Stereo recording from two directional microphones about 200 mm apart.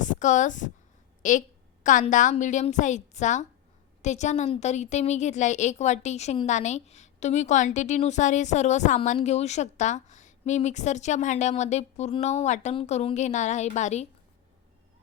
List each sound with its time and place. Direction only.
0.0 s a woman's voice: 40° left (ahead or behind)